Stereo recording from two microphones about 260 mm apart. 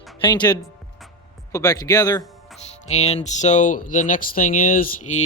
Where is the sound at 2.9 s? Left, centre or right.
Left.